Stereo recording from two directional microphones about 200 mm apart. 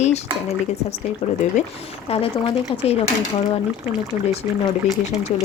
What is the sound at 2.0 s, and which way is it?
Speech, 30° left (ahead or behind).